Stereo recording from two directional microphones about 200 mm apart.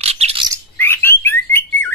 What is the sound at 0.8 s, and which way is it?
Bird, 10° left (ahead or behind).